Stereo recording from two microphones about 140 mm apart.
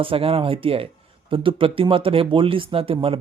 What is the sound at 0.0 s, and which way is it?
Speech, 40° right (ahead or behind).